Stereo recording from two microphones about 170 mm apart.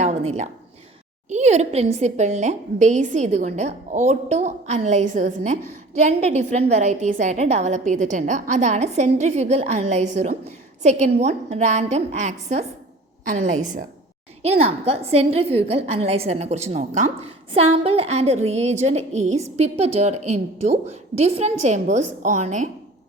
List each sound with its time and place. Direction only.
0.0 s a woman's voice: 40° right (ahead or behind)